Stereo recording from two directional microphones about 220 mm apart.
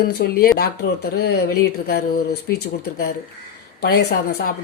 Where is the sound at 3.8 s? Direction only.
45° left (ahead or behind).